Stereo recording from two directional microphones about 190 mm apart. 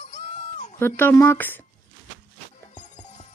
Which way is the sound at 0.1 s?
35° left (ahead or behind).